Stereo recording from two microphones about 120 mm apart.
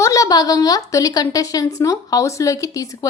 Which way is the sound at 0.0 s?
30° left (ahead or behind).